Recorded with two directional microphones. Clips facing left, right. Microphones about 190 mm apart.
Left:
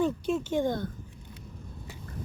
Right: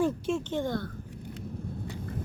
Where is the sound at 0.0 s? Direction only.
Centre (ahead or behind).